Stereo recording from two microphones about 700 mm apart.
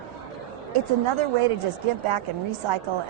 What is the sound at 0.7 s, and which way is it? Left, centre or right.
Speech, right.